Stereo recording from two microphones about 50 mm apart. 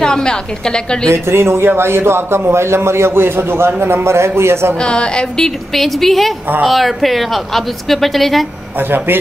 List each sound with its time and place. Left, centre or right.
0.0 s a woman's voice: centre
1.1 s a man's voice: right
4.8 s a woman's voice: centre
5.8 s speech: centre
8.9 s a man's voice: right